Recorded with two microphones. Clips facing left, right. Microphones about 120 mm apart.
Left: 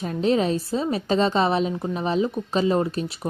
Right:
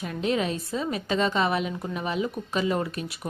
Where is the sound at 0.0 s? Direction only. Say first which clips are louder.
Left 5 dB; 30° left (ahead or behind).